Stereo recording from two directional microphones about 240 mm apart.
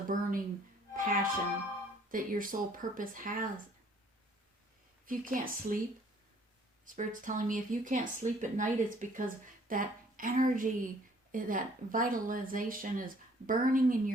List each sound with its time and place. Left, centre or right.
0.1 s speech: right
5.0 s speech: right
6.8 s speech: right